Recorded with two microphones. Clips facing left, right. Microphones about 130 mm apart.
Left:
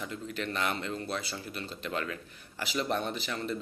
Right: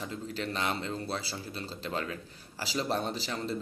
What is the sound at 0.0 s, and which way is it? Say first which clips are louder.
A man's voice: even; 35° right (ahead or behind).